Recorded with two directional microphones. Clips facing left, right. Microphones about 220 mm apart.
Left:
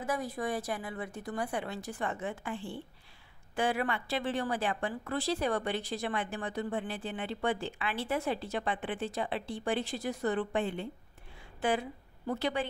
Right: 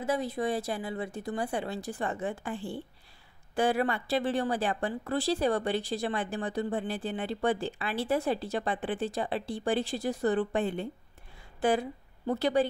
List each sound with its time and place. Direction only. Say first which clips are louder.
0.0 s a woman's voice: right 4 dB; 25° right (ahead or behind)